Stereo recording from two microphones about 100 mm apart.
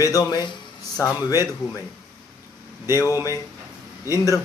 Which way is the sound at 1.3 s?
35° left (ahead or behind).